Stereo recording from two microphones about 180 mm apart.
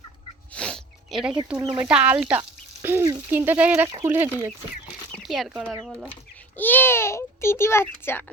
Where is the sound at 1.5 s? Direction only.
20° right (ahead or behind).